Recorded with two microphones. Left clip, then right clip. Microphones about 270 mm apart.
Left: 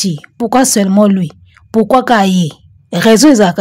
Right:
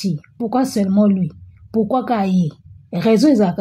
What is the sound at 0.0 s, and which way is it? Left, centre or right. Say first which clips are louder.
A woman's voice: left 8 dB; left.